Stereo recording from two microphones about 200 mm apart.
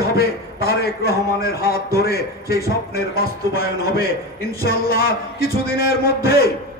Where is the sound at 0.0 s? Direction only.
50° left (ahead or behind).